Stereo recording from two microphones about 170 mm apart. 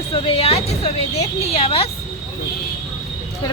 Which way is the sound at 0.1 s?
35° left (ahead or behind).